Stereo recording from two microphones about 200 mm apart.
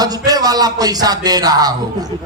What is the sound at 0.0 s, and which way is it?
A man's voice, 20° right (ahead or behind).